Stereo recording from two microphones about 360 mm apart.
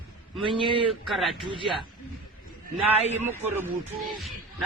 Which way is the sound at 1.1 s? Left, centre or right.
Centre.